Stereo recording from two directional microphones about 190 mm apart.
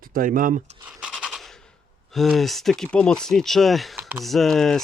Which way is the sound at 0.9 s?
5° right (ahead or behind).